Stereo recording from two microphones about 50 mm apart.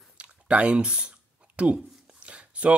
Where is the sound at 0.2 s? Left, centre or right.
Right.